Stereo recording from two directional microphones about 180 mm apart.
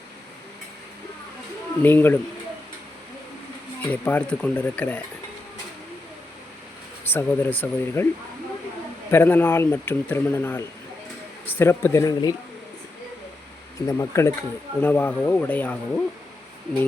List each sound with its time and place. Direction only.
1.8 s speech: 10° left (ahead or behind)
3.8 s speech: 10° left (ahead or behind)
7.1 s speech: 10° left (ahead or behind)
9.1 s speech: 10° left (ahead or behind)
13.7 s speech: 15° left (ahead or behind)